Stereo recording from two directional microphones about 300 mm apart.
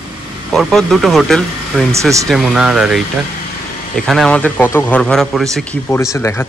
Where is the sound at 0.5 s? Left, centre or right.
Centre.